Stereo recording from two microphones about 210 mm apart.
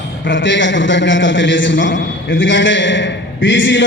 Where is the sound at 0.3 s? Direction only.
60° left (ahead or behind).